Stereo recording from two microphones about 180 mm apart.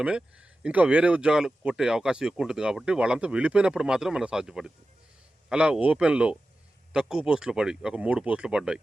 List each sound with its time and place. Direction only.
0.0 s speech: 5° right (ahead or behind)